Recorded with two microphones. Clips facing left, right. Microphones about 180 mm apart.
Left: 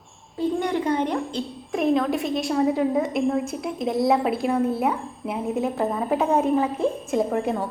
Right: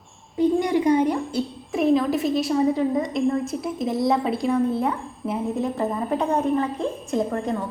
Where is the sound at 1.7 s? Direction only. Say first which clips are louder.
Right 2 dB; centre (ahead or behind).